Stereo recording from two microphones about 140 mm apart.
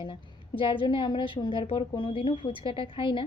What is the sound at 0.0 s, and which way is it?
A woman's voice, 35° left (ahead or behind).